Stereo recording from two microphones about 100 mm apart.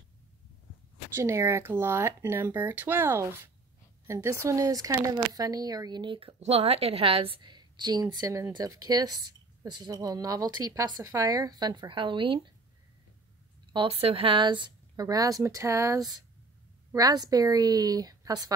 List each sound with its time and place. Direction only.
1.1 s speech: 25° right (ahead or behind); by 6.1 s 45° right (ahead or behind)
6.1 s a woman's voice: 80° right; by 12.4 s 55° right (ahead or behind)
13.7 s speech: 70° right (ahead or behind); by 18.5 s 40° right (ahead or behind)